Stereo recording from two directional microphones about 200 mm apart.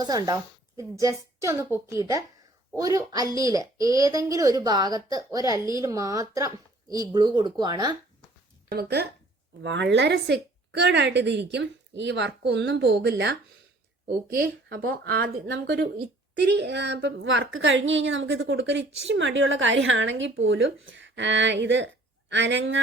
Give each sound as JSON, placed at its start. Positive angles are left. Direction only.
{"t": 0.0, "sound": "a woman's voice", "side_deg": -20}
{"t": 8.7, "sound": "a woman's voice", "side_deg": -55}
{"t": 14.3, "sound": "a woman's voice", "side_deg": -45}